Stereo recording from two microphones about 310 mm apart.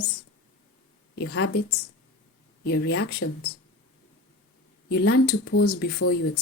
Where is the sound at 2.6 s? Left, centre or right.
Left.